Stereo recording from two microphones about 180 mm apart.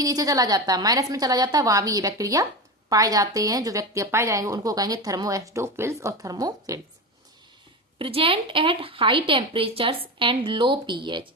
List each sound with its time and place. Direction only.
0.0 s a woman's voice: 20° right (ahead or behind)
7.9 s a woman's voice: 30° right (ahead or behind)